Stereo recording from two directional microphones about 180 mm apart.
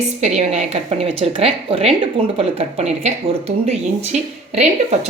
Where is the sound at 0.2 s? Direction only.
40° right (ahead or behind).